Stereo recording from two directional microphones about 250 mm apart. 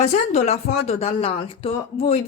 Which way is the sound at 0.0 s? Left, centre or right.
Left.